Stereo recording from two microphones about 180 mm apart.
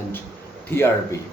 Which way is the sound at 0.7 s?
10° left (ahead or behind).